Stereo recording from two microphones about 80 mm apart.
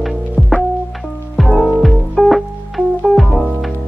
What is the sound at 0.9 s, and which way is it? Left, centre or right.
Music, centre.